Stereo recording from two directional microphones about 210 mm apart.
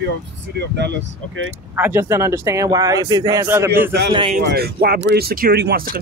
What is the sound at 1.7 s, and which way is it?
Speech, 10° right (ahead or behind).